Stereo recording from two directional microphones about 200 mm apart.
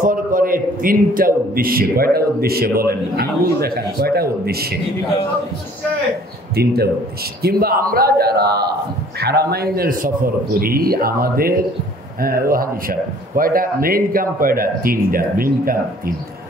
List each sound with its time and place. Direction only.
0.0 s a man's voice: 40° right (ahead or behind)
6.5 s speech: 50° right (ahead or behind)